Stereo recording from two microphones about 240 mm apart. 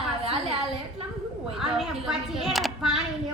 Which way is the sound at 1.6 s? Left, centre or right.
Centre.